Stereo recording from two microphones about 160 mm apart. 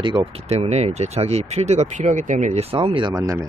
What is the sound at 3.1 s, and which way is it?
Speech, 20° right (ahead or behind).